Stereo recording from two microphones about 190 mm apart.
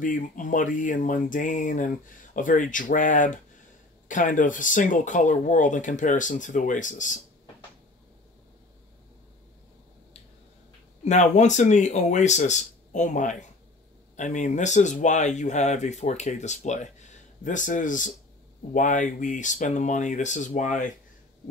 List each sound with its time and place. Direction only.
0.0 s speech: 45° left (ahead or behind)
11.1 s speech: 40° left (ahead or behind)